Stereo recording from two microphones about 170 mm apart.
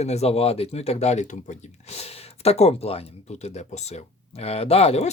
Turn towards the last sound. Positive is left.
turn(degrees=35)  # may be behind; listen again after turning